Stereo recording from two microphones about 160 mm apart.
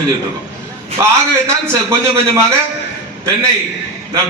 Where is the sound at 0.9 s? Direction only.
15° right (ahead or behind).